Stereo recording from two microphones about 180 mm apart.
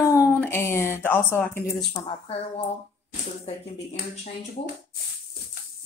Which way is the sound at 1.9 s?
30° left (ahead or behind).